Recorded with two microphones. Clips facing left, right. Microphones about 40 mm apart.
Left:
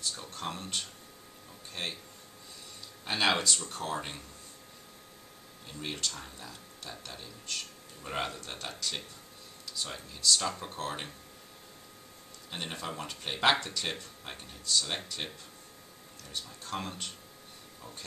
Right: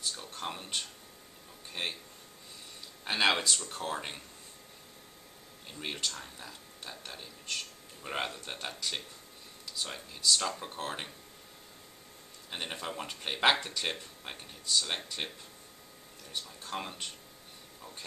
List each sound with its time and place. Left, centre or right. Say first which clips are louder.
0.0 s a sound: left 1 dB; centre
1.7 s speech: right 1 dB; centre
3.1 s speech: even; centre
5.7 s speech: even; centre
12.4 s speech: even; centre